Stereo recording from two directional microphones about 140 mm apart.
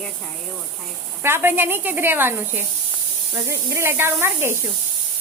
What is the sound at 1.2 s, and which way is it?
Speech, 15° right (ahead or behind).